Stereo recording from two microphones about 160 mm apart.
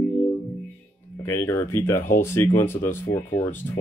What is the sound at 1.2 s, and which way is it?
Speech, 15° left (ahead or behind).